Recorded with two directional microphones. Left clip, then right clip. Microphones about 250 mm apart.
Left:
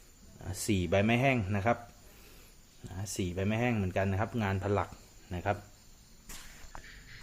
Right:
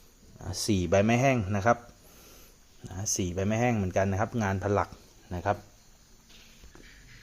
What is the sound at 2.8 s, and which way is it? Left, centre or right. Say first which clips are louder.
Speech: right 6 dB; centre.